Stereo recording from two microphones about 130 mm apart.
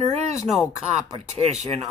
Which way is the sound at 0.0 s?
55° right (ahead or behind).